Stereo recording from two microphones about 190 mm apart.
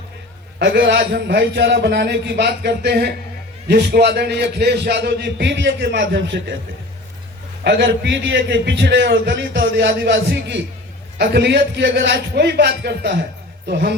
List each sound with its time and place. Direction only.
0.6 s a man's voice: 60° right (ahead or behind)
7.6 s a man's voice: 60° right (ahead or behind)